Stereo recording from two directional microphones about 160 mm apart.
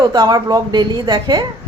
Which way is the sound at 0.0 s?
25° right (ahead or behind).